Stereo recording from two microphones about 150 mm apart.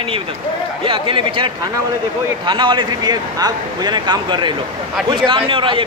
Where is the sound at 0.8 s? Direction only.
35° right (ahead or behind).